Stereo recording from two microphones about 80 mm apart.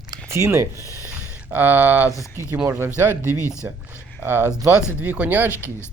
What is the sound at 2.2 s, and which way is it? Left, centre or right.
Speech, left.